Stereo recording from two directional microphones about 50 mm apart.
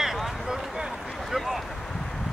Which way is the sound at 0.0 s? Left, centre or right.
Centre.